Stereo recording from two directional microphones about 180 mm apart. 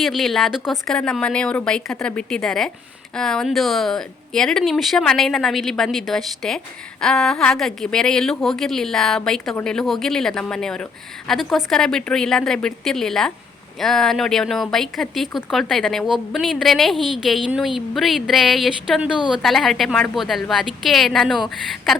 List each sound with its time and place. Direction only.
0.0 s speech: centre (ahead or behind)